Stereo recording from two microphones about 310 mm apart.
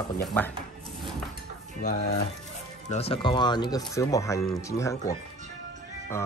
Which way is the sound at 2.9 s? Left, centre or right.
Centre.